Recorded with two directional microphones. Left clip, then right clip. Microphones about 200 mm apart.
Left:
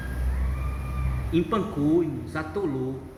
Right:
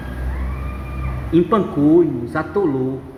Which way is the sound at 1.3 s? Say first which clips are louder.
Right 10 dB; 50° right (ahead or behind).